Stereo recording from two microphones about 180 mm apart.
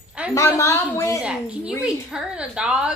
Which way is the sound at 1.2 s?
5° right (ahead or behind).